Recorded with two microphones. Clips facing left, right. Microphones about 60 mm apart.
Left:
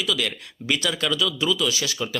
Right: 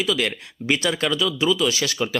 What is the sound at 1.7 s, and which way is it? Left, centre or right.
Speech, right.